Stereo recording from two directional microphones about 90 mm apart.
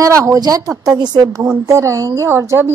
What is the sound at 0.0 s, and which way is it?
Speech, 35° right (ahead or behind).